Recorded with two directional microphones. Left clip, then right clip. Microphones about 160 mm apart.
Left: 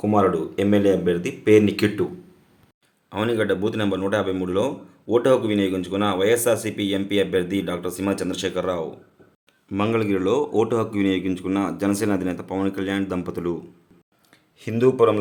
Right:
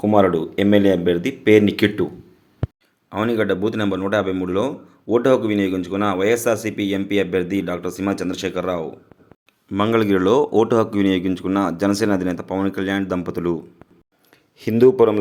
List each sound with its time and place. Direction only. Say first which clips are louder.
0.0 s speech: right 4 dB; 40° right (ahead or behind)
3.1 s a man's voice: right 2 dB; 20° right (ahead or behind)
10.0 s a man's voice: right 7 dB; 35° right (ahead or behind)
14.6 s speech: right 4 dB; 30° right (ahead or behind)